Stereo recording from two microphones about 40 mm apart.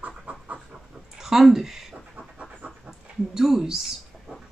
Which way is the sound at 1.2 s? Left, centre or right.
Centre.